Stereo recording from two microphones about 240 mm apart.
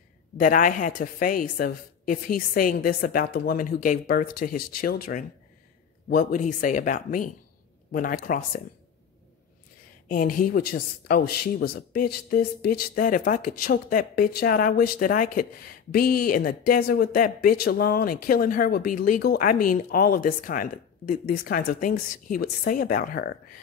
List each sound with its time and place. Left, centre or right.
0.4 s speech: left
6.0 s speech: left
10.0 s speech: left